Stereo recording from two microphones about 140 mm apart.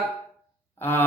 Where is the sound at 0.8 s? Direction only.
15° left (ahead or behind).